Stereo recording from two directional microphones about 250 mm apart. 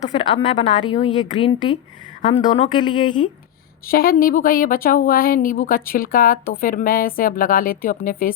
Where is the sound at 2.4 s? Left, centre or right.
Left.